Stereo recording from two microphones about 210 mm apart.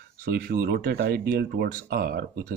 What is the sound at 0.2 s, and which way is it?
Speech, 45° right (ahead or behind).